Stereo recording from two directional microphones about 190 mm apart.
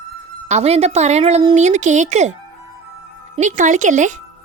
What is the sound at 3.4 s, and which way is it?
Speech, 40° right (ahead or behind).